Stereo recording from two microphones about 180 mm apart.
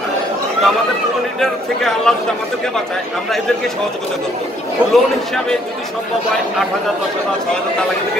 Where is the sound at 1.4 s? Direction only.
Centre (ahead or behind).